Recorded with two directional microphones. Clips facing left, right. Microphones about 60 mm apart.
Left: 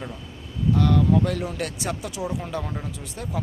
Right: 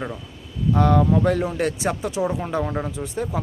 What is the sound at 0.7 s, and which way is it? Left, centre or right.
Speech, right.